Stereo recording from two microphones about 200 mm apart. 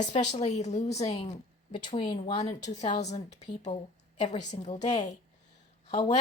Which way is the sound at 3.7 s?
25° left (ahead or behind).